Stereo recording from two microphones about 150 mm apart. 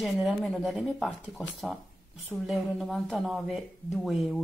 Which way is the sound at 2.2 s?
5° right (ahead or behind).